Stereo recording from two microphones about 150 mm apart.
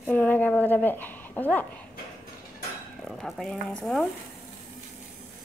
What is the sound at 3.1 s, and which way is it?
Speech, centre (ahead or behind).